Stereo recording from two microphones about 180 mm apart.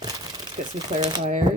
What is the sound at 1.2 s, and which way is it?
Speech, 45° right (ahead or behind).